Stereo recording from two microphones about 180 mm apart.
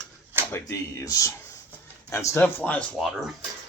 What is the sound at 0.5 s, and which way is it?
Speech, 15° left (ahead or behind).